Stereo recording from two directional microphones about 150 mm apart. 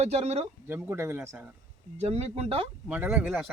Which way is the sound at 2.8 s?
10° right (ahead or behind).